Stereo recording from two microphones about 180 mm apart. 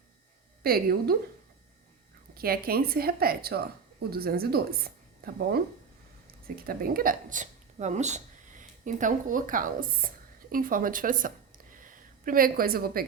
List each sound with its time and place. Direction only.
0.6 s a woman's voice: 55° right (ahead or behind)
2.3 s a woman's voice: 55° right (ahead or behind)
6.6 s a woman's voice: 55° right (ahead or behind)